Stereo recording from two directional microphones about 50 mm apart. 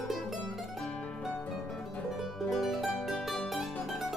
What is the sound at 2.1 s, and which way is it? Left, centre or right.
Music, centre.